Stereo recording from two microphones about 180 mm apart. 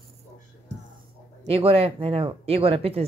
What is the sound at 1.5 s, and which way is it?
Speech, 30° right (ahead or behind).